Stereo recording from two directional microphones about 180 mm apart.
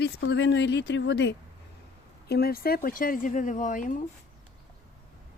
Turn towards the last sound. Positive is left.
turn(degrees=45)  # may be behind; listen again after turning